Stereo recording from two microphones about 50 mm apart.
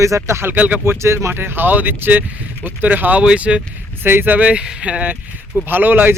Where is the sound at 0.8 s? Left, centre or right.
Right.